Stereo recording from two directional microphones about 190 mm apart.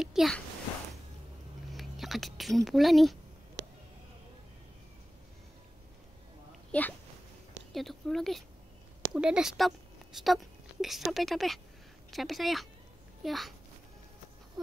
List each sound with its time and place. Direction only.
0.0 s speech: centre (ahead or behind)
1.7 s speech: centre (ahead or behind)
3.6 s a sound: 70° right (ahead or behind)
6.7 s a child's voice: 5° left (ahead or behind)